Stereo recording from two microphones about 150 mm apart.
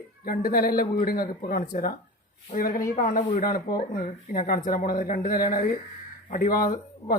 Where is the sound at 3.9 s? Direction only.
70° left (ahead or behind).